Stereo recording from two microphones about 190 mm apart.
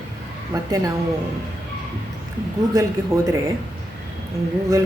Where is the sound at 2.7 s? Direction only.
15° right (ahead or behind).